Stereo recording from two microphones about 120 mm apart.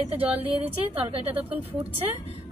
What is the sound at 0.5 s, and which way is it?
Speech, 50° right (ahead or behind).